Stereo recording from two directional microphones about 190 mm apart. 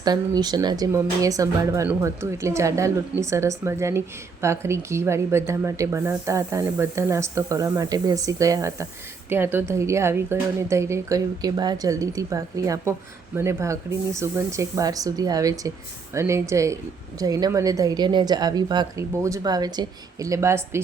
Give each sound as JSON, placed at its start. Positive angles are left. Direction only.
{"t": 0.0, "sound": "a woman's voice", "side_deg": -20}